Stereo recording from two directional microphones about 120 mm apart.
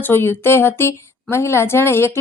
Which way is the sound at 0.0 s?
20° left (ahead or behind).